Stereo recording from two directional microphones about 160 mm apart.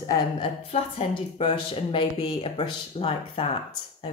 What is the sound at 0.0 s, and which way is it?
Speech, 25° left (ahead or behind).